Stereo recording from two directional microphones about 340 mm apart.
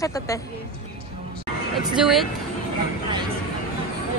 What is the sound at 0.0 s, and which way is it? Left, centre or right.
Speech, centre.